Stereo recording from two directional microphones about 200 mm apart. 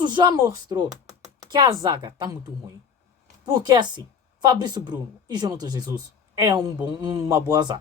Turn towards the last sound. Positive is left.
turn(degrees=-20)  # may be behind; listen again after turning